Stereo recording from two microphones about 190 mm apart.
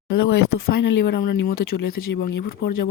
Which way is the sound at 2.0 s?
90° left.